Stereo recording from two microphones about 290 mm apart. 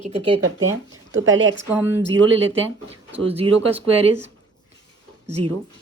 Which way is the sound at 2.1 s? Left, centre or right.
Right.